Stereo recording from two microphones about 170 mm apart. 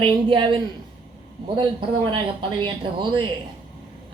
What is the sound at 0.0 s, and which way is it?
Speech, 30° right (ahead or behind).